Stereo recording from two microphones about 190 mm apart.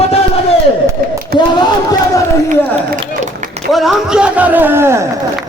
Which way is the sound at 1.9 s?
15° left (ahead or behind).